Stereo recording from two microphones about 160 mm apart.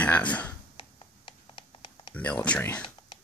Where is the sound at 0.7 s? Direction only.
35° left (ahead or behind).